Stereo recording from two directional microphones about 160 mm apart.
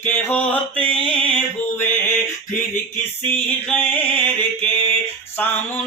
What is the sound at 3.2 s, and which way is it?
Mantra, 10° left (ahead or behind).